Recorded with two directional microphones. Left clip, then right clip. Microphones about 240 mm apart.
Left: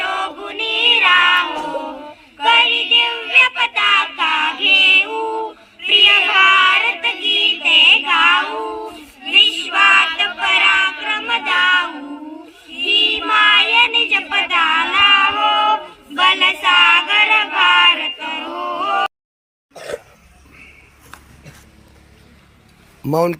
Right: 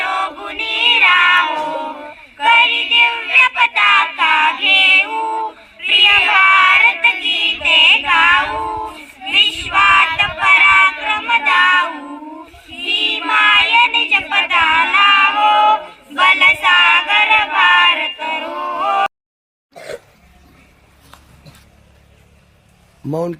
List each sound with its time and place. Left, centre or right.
0.0 s music: centre
4.1 s female singing: centre
12.6 s child singing: centre
23.1 s speech: centre